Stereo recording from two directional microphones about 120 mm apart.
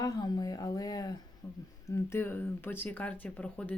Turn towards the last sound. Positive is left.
turn(degrees=10)  # may be behind; listen again after turning